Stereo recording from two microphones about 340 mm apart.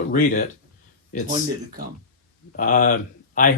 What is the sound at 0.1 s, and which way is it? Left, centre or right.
Speech, left.